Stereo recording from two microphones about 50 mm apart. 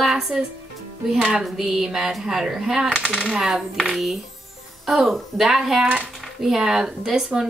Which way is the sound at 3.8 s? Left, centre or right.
Centre.